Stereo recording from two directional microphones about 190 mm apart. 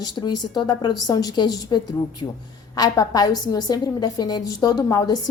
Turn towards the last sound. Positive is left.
turn(degrees=20)  # may be behind; listen again after turning